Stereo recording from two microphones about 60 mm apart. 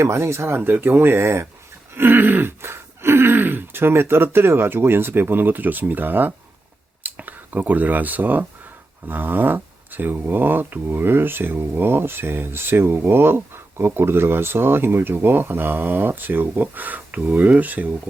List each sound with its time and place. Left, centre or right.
0.0 s speech: right
0.5 s speech: right
2.0 s speech: right